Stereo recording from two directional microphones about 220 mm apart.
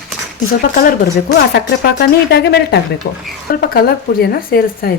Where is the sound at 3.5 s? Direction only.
45° left (ahead or behind).